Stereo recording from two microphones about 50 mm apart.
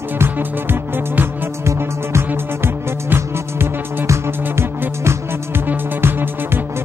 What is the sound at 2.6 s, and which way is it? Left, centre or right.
Music, right.